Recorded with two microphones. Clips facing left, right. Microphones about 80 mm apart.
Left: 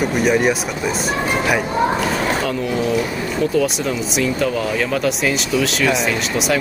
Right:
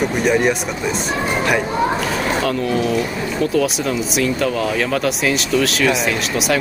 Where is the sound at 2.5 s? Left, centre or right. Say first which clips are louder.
Right 1 dB; centre.